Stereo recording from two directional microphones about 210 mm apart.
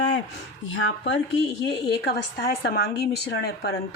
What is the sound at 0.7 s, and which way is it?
Speech, 60° left (ahead or behind).